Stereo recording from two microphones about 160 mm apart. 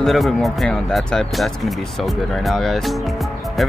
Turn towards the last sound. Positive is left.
turn(degrees=0)  # may be behind; listen again after turning